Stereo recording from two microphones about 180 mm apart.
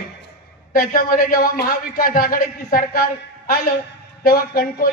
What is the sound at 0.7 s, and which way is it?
A woman's voice, 50° left (ahead or behind).